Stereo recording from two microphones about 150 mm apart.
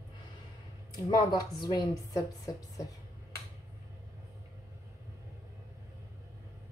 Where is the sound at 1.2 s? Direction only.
30° left (ahead or behind).